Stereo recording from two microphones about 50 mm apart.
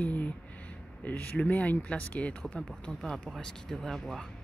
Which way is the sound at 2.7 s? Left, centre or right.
Centre.